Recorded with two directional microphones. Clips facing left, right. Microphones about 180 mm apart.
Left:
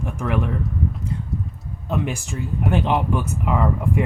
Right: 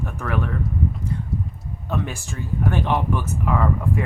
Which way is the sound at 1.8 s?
20° left (ahead or behind).